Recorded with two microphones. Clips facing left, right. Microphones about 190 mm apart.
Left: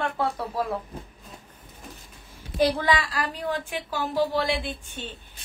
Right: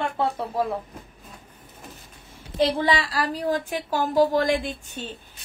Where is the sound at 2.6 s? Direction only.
25° right (ahead or behind).